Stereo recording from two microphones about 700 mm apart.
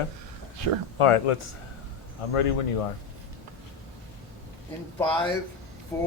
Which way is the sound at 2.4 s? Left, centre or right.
Left.